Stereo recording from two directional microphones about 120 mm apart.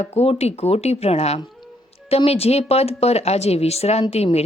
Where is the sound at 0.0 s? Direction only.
65° left (ahead or behind).